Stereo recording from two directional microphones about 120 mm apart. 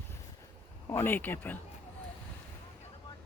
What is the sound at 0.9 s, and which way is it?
Speech, 20° left (ahead or behind).